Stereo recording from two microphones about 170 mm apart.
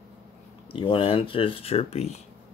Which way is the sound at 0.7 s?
30° left (ahead or behind).